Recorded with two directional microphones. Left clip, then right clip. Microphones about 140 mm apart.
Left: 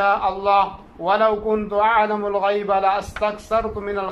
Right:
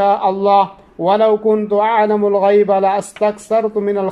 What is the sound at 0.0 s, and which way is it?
Speech, 45° right (ahead or behind).